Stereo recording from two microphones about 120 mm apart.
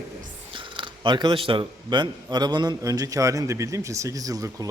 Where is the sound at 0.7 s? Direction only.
40° right (ahead or behind).